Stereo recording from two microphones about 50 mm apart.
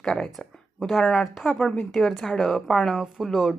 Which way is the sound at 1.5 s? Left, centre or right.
Centre.